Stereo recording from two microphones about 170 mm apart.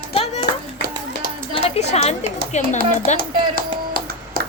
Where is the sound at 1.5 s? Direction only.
40° left (ahead or behind).